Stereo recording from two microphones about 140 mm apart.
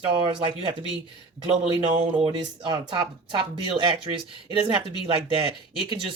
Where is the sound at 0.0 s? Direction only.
40° right (ahead or behind).